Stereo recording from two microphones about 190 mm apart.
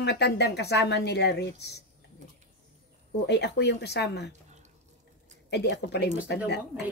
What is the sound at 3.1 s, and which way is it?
Speech, 60° left (ahead or behind).